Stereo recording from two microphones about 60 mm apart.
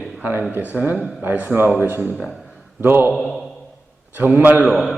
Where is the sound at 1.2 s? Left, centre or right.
Right.